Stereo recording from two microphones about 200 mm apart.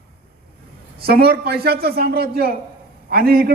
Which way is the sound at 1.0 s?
50° right (ahead or behind).